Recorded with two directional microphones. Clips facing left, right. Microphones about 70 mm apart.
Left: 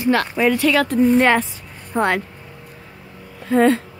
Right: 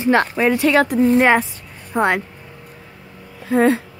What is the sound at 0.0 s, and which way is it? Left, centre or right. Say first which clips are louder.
Speech: right 1 dB; right.